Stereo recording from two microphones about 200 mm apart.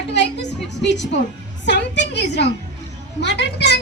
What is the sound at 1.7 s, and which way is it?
Speech, 60° left (ahead or behind).